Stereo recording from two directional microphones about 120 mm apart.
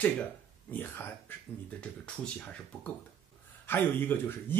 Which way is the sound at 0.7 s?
15° left (ahead or behind).